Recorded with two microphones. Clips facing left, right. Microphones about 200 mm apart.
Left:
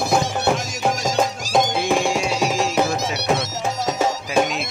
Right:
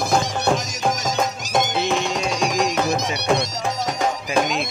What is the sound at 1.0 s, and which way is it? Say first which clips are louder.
Music: left 2 dB; 20° right (ahead or behind).